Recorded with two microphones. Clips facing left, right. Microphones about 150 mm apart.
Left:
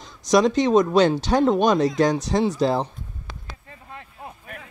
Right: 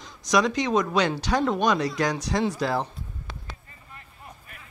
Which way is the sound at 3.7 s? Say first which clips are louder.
Left 8 dB; 90° left.